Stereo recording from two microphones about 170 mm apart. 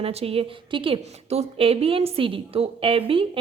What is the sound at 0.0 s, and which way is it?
A woman's voice, 35° right (ahead or behind).